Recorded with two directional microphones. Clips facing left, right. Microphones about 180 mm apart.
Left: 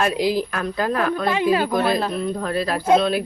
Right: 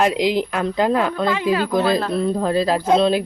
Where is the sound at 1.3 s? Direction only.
20° left (ahead or behind).